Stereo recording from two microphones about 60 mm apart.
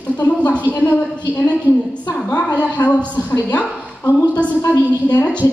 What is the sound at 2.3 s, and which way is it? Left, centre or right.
Speech, left.